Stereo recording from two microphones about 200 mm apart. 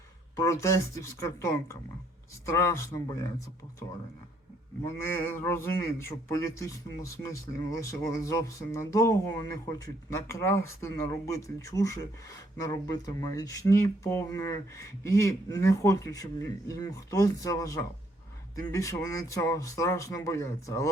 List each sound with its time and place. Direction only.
0.3 s speech: 15° left (ahead or behind)
4.8 s speech: 10° left (ahead or behind)